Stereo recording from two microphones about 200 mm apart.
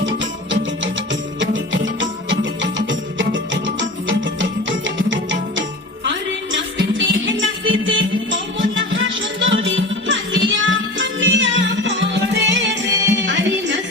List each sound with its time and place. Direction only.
0.0 s music: 70° right (ahead or behind)